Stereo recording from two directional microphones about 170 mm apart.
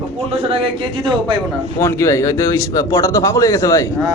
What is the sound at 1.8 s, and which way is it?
A man's voice, 20° left (ahead or behind).